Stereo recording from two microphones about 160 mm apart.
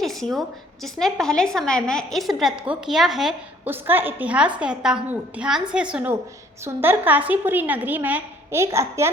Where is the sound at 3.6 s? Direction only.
15° right (ahead or behind).